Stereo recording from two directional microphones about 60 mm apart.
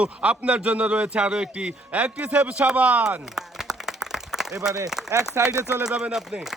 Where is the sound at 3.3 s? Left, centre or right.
Centre.